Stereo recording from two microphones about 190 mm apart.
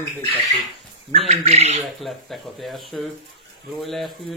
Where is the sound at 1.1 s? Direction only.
35° right (ahead or behind).